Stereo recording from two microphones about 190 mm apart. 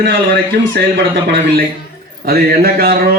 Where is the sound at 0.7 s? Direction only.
60° right (ahead or behind).